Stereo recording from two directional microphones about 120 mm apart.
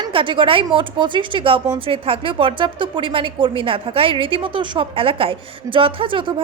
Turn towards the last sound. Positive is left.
turn(degrees=-45)  # may be behind; listen again after turning